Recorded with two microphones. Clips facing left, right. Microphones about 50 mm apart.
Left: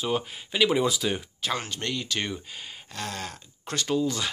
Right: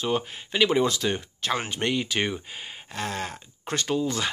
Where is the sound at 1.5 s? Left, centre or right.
Right.